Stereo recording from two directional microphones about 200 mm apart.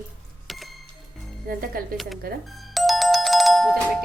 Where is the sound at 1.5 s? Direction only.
45° right (ahead or behind).